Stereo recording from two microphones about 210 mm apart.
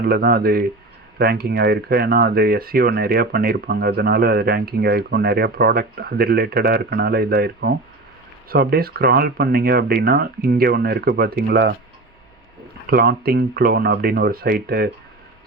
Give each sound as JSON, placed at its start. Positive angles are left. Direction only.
{"t": 0.0, "sound": "speech", "side_deg": -45}
{"t": 12.9, "sound": "speech", "side_deg": -45}